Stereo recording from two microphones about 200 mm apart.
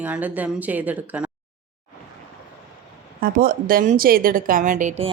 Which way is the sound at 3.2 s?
45° right (ahead or behind).